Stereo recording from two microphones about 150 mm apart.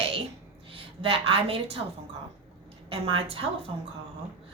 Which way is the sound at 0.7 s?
40° right (ahead or behind).